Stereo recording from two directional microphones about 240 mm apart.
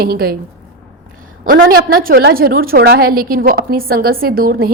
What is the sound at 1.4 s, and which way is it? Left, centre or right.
A woman's voice, right.